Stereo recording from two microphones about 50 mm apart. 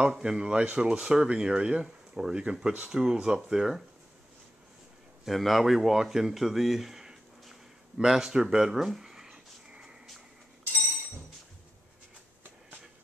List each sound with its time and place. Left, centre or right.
0.0 s speech: centre
5.2 s speech: centre
8.0 s a sound: centre